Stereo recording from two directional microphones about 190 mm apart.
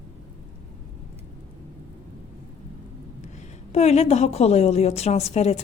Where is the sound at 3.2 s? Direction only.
35° left (ahead or behind).